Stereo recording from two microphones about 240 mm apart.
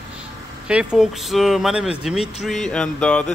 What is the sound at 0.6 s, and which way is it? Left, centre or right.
Speech, centre.